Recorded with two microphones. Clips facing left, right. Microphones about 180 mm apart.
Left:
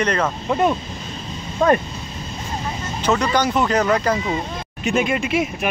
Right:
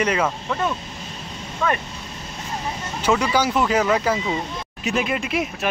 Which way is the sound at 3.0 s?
10° right (ahead or behind).